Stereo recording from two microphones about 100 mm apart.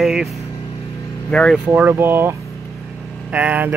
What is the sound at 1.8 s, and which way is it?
Speech, 20° right (ahead or behind).